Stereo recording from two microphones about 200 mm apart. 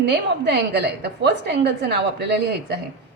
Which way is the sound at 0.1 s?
55° right (ahead or behind).